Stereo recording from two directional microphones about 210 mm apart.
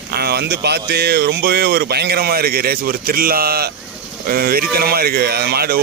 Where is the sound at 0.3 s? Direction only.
50° right (ahead or behind).